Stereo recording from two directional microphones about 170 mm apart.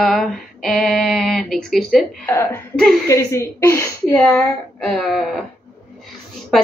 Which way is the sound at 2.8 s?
Centre (ahead or behind).